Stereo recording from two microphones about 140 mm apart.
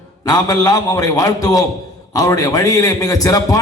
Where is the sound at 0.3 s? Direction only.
25° left (ahead or behind).